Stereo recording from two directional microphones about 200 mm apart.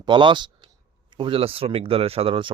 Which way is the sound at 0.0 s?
25° right (ahead or behind).